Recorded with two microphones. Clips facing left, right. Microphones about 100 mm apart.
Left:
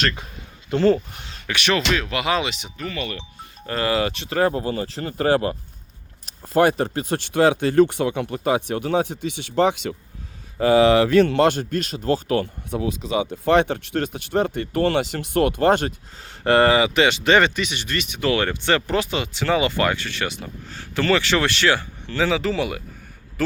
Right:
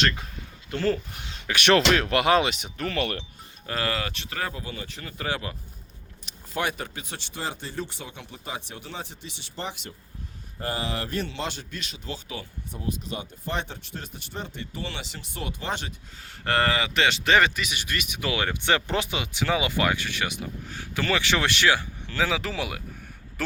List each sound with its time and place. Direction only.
0.7 s speech: 25° left (ahead or behind)
1.1 s speech: 10° right (ahead or behind)
1.6 s speech: 55° right (ahead or behind)
2.7 s speech: 70° right (ahead or behind)
3.9 s speech: 20° left (ahead or behind)
4.3 s speech: 40° left (ahead or behind)
16.2 s speech: 20° left (ahead or behind)
16.8 s speech: 5° left (ahead or behind)